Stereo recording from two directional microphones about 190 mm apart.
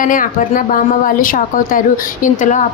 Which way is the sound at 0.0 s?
45° left (ahead or behind).